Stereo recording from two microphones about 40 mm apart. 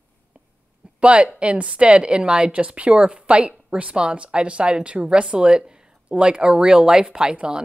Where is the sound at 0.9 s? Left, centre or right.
Right.